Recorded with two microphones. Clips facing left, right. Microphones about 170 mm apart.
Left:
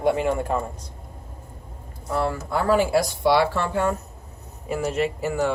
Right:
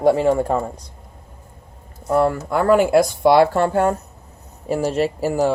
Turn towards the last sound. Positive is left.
turn(degrees=-35)  # may be behind; listen again after turning